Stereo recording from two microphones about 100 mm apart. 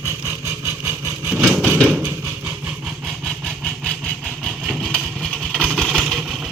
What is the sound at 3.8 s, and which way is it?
Vehicle, centre (ahead or behind).